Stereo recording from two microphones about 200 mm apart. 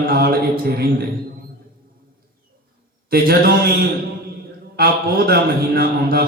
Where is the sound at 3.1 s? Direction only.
50° right (ahead or behind).